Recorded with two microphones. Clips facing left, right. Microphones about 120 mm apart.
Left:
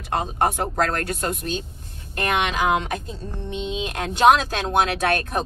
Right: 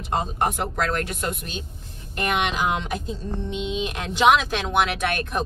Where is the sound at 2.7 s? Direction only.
50° left (ahead or behind).